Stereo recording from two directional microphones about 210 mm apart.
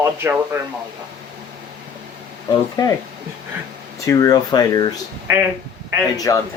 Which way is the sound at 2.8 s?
20° left (ahead or behind).